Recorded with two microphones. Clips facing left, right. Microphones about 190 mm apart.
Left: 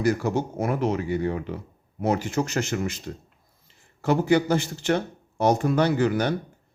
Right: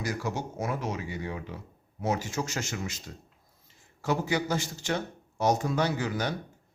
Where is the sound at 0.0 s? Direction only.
60° left (ahead or behind).